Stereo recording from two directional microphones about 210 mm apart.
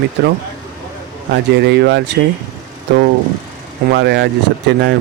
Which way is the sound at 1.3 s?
55° right (ahead or behind).